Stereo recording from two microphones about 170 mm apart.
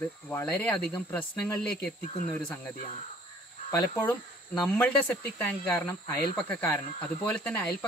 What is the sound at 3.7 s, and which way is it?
Speech, 15° left (ahead or behind).